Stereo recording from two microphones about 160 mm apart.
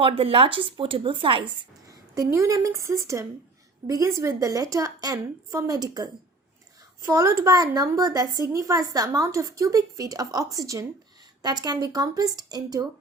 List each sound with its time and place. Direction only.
0.0 s speech: 35° right (ahead or behind)
1.9 s a woman's voice: 20° right (ahead or behind)